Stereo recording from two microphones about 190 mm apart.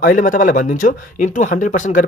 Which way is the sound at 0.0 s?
45° left (ahead or behind).